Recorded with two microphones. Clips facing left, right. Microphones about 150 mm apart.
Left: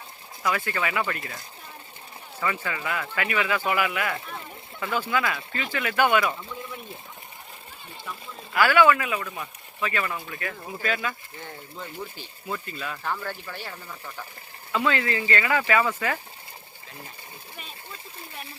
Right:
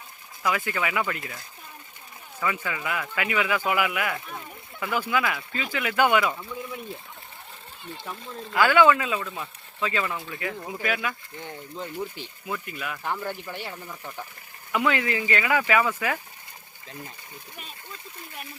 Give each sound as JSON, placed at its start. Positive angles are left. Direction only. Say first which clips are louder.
{"t": 0.4, "sound": "speech", "louder": "even", "side_deg": -10}
{"t": 2.4, "sound": "speech", "louder": "even", "side_deg": -10}
{"t": 8.5, "sound": "speech", "louder": "even", "side_deg": -20}
{"t": 17.9, "sound": "speech", "louder": "even", "side_deg": 30}